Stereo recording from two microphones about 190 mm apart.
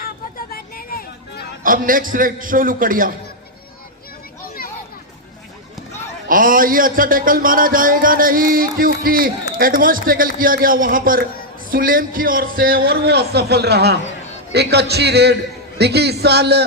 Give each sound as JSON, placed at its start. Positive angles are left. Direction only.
{"t": 0.5, "sound": "hubbub", "side_deg": 50}
{"t": 1.6, "sound": "speech", "side_deg": -45}
{"t": 6.2, "sound": "speech", "side_deg": -45}
{"t": 14.5, "sound": "music", "side_deg": -60}